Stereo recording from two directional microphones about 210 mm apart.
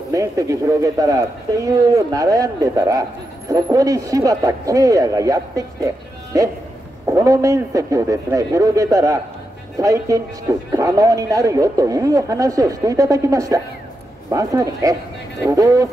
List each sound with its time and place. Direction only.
0.1 s speech: 15° right (ahead or behind)
7.1 s speech: 15° right (ahead or behind)